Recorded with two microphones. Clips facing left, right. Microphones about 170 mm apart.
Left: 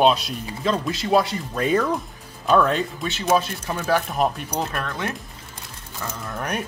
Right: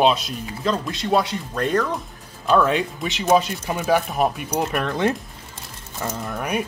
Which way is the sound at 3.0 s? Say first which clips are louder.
Right 5 dB; 15° right (ahead or behind).